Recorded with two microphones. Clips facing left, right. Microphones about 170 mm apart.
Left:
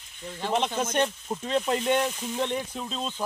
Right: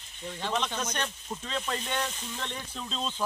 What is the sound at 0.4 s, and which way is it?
Speech, 20° left (ahead or behind).